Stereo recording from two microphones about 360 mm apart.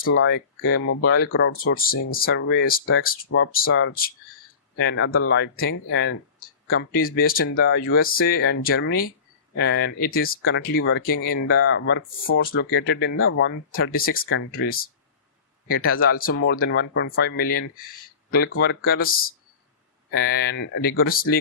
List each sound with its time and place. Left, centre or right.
0.0 s speech: left
15.9 s speech: left
16.3 s speech: left